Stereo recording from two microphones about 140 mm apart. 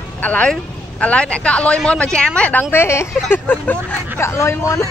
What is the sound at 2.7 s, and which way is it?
A woman's voice, 20° left (ahead or behind).